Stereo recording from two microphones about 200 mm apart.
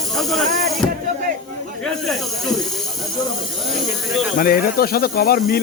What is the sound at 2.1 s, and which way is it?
Speech, centre (ahead or behind).